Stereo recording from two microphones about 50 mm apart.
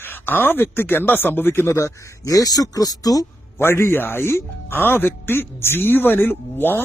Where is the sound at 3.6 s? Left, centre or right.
Left.